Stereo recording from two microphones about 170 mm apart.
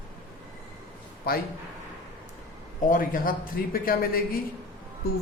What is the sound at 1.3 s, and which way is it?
Speech, 60° left (ahead or behind).